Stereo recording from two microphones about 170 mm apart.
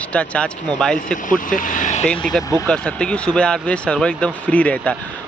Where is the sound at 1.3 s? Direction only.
50° left (ahead or behind).